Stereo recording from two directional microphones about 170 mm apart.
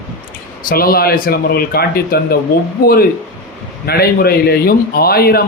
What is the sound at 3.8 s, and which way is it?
Speech, 65° left (ahead or behind).